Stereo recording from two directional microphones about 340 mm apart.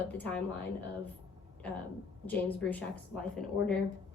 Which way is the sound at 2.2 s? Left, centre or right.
Centre.